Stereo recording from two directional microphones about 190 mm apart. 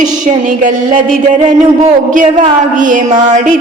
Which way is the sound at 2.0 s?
40° right (ahead or behind).